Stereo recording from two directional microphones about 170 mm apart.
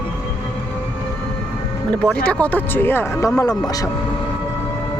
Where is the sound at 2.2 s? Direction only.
5° left (ahead or behind).